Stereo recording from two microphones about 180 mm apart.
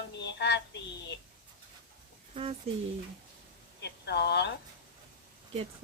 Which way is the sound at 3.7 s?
70° left (ahead or behind).